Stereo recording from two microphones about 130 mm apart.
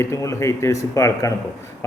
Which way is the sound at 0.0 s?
20° left (ahead or behind).